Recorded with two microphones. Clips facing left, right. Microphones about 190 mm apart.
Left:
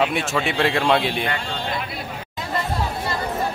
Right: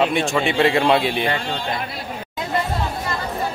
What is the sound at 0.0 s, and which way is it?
A man's voice, centre (ahead or behind).